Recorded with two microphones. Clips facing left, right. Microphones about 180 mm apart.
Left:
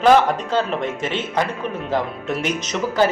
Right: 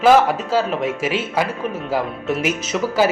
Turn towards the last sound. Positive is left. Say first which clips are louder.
# right 1 dB
turn(degrees=-5)  # may be behind; listen again after turning